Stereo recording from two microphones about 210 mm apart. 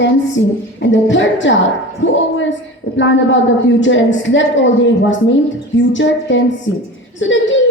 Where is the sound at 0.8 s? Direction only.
60° left (ahead or behind).